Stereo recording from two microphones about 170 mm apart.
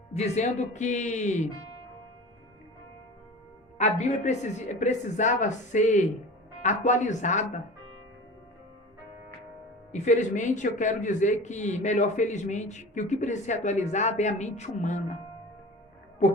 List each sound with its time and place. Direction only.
0.1 s a man's voice: 40° left (ahead or behind)
3.8 s a man's voice: 45° left (ahead or behind)
9.9 s a man's voice: 45° left (ahead or behind)